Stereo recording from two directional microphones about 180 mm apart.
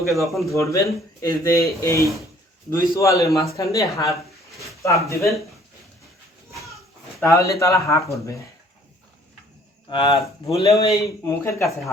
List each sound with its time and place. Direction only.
0.2 s speech: centre (ahead or behind)
0.4 s speech: 15° left (ahead or behind)
7.2 s speech: 15° left (ahead or behind)
9.9 s speech: 25° left (ahead or behind)